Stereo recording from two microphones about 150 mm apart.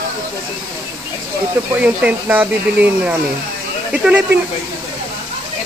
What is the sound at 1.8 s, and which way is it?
Speech, 10° right (ahead or behind).